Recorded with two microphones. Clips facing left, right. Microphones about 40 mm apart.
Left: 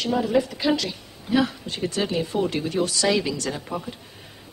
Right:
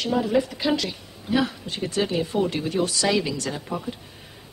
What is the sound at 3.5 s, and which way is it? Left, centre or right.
Speech, centre.